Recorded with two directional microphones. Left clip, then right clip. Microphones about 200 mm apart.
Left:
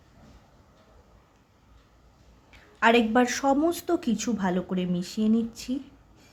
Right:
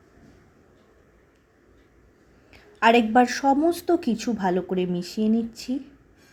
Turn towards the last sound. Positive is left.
turn(degrees=0)  # may be behind; listen again after turning